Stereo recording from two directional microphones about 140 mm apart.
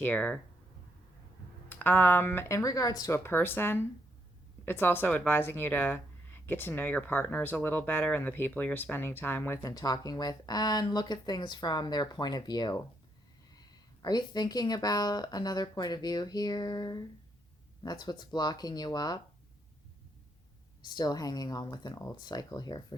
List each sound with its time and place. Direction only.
0.0 s speech: 10° left (ahead or behind)
1.7 s a woman's voice: 15° left (ahead or behind)
20.9 s a woman's voice: 30° left (ahead or behind)